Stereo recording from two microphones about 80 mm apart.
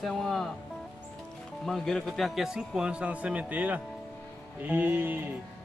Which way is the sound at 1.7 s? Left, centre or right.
Centre.